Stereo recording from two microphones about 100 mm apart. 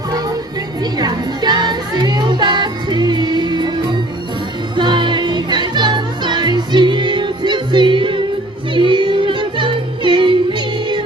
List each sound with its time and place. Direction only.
0.9 s music: 45° right (ahead or behind)